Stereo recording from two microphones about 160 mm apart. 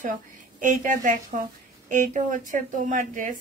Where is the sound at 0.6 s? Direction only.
55° right (ahead or behind).